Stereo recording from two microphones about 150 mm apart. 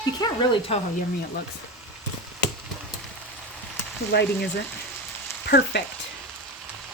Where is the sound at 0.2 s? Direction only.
35° left (ahead or behind).